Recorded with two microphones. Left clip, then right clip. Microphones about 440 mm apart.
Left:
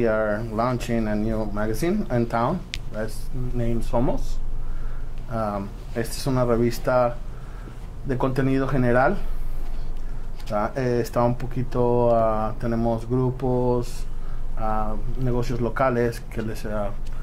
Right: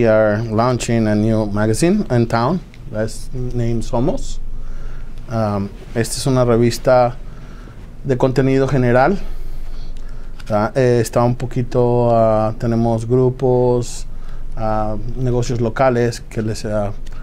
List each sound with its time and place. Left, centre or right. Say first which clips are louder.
0.0 s speech: right 9 dB; right
3.5 s speech: right 4 dB; right
5.3 s speech: right 6 dB; right
8.1 s speech: right 8 dB; right
10.5 s speech: right 9 dB; right